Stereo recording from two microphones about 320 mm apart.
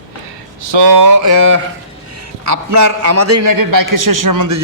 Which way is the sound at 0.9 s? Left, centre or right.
Right.